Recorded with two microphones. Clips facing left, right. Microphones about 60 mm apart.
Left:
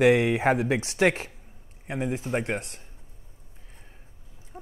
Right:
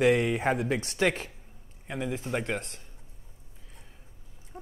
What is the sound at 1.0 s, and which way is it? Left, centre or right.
Speech, left.